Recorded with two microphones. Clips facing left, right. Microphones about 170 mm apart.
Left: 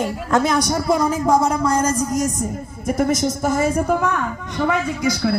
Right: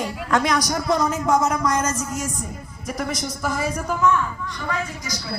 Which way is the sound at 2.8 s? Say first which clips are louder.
Left 9 dB; 50° left (ahead or behind).